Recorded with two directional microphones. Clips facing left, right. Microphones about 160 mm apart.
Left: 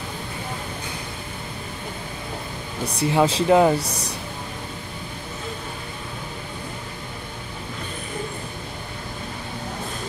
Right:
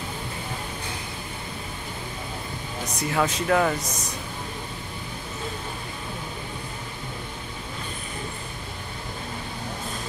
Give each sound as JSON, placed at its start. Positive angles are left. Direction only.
{"t": 2.8, "sound": "speech", "side_deg": 30}